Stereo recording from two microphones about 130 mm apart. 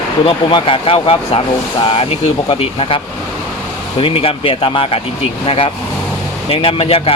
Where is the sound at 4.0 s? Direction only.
45° left (ahead or behind).